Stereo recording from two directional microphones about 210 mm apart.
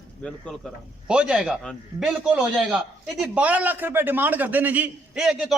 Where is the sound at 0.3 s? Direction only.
Centre (ahead or behind).